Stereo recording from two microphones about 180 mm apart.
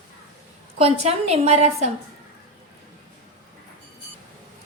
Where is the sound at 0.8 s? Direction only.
35° right (ahead or behind).